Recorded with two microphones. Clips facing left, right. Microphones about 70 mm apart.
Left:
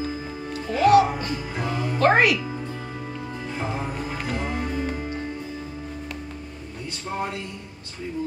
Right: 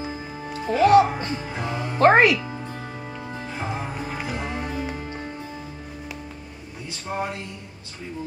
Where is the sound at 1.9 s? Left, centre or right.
Right.